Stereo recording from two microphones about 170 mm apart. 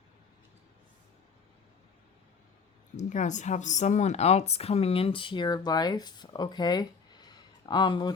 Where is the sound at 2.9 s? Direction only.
45° left (ahead or behind).